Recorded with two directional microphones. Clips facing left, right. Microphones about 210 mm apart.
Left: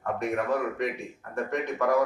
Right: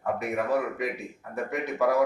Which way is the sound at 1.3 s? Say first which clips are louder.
Left 1 dB; 5° right (ahead or behind).